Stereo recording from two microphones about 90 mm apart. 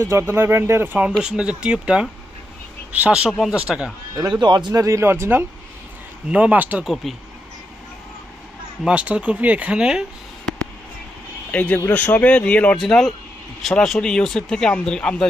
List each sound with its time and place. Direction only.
0.0 s speech: 30° right (ahead or behind)
1.2 s speech: 10° right (ahead or behind)
3.2 s speech: centre (ahead or behind)
4.3 s speech: 55° right (ahead or behind)
4.7 s speech: 35° right (ahead or behind)
6.2 s speech: 15° right (ahead or behind)
6.8 s speech: centre (ahead or behind)
8.8 s speech: 15° right (ahead or behind)
11.5 s speech: 20° left (ahead or behind)
12.7 s speech: 5° left (ahead or behind)